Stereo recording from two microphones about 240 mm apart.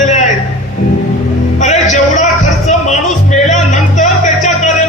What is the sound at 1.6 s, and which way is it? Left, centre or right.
Music, left.